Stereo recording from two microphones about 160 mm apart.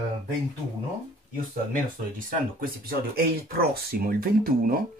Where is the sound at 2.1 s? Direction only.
60° right (ahead or behind).